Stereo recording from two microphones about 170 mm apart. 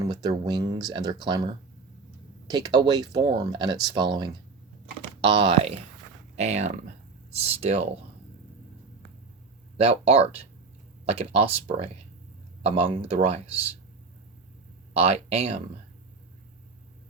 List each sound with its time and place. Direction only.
0.0 s speech: 25° right (ahead or behind)
9.7 s speech: 35° right (ahead or behind)
14.9 s speech: 35° right (ahead or behind)